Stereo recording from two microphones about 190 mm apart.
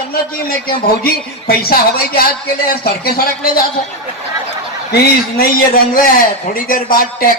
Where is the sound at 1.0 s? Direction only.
50° left (ahead or behind).